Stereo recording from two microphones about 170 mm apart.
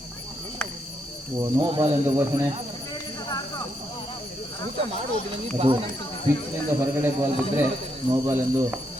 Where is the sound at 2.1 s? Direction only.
15° right (ahead or behind).